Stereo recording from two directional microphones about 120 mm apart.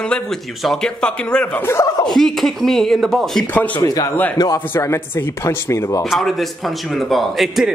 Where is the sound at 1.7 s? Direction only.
25° left (ahead or behind).